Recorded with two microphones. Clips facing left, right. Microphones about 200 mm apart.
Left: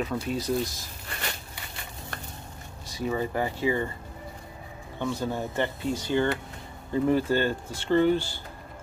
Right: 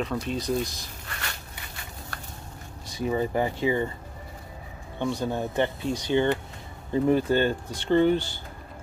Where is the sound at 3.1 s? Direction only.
20° right (ahead or behind).